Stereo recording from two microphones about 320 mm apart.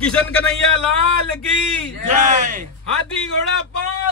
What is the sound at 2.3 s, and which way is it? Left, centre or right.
Speech, right.